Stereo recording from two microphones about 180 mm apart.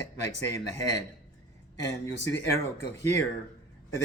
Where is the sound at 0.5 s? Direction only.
20° left (ahead or behind).